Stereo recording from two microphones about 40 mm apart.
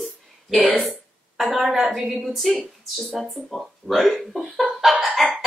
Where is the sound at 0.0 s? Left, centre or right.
Centre.